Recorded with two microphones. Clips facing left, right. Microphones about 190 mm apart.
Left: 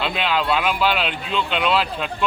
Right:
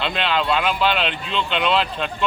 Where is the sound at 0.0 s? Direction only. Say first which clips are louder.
Even; 5° left (ahead or behind).